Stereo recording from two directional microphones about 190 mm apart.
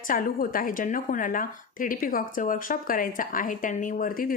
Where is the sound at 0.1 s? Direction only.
45° left (ahead or behind).